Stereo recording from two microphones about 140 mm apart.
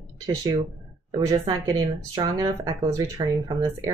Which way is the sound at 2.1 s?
30° right (ahead or behind).